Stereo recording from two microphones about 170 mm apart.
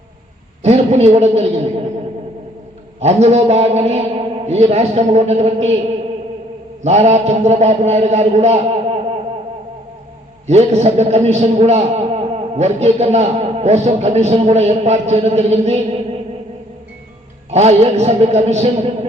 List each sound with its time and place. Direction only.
0.6 s a man's voice: 40° right (ahead or behind)
3.0 s a man's voice: 40° right (ahead or behind)
6.8 s a man's voice: 40° right (ahead or behind)
10.4 s a man's voice: 40° right (ahead or behind)
17.5 s a man's voice: 40° right (ahead or behind)